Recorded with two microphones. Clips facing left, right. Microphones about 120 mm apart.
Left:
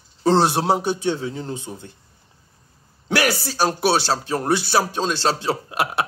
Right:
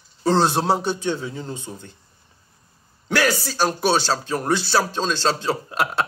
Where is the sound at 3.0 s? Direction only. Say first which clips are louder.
Even; 15° left (ahead or behind).